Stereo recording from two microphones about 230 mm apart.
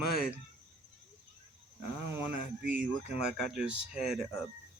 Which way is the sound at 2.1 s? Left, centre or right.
Centre.